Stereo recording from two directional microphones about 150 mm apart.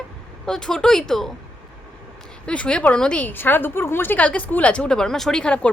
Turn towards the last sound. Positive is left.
turn(degrees=10)  # may be behind; listen again after turning